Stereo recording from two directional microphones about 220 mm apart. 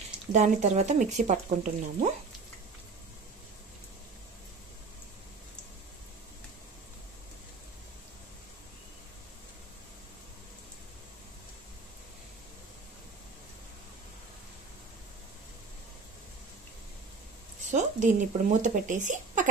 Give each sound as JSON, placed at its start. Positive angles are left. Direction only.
{"t": 0.3, "sound": "speech", "side_deg": -30}
{"t": 17.6, "sound": "speech", "side_deg": -35}